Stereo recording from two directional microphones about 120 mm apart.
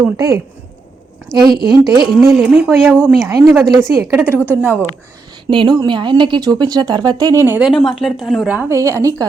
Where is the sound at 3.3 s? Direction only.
30° right (ahead or behind).